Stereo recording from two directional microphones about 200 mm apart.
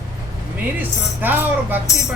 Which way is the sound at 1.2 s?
10° right (ahead or behind).